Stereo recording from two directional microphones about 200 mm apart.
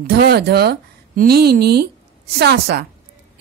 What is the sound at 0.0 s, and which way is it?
Speech, 50° right (ahead or behind).